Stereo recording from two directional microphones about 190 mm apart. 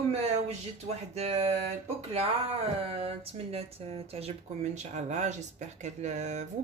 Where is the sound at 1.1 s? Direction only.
35° right (ahead or behind).